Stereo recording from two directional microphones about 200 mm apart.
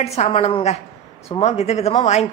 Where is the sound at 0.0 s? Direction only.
30° left (ahead or behind).